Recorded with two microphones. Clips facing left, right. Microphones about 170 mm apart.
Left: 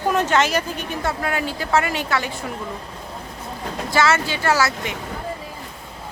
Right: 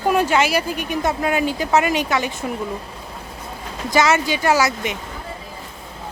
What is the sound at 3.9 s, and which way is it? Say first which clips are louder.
Speech: right 3 dB; 15° right (ahead or behind).